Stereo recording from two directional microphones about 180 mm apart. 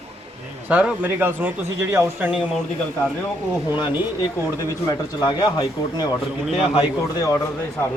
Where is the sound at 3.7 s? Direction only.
25° left (ahead or behind).